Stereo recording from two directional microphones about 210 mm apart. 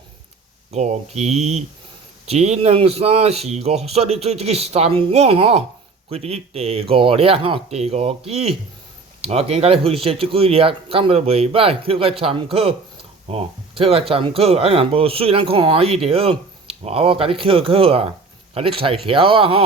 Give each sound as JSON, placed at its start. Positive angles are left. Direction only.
{"t": 0.7, "sound": "speech", "side_deg": -30}